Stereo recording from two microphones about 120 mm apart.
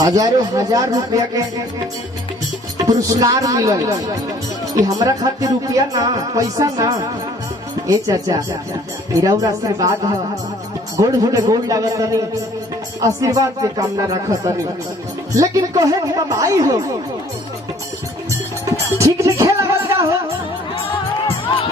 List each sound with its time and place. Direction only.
0.0 s speech: 30° right (ahead or behind)
2.8 s speech: 30° right (ahead or behind)
10.9 s speech: 30° right (ahead or behind)
18.6 s music: 25° right (ahead or behind)